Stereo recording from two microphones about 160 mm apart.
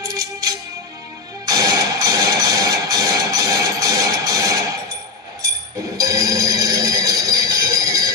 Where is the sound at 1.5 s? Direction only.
20° right (ahead or behind).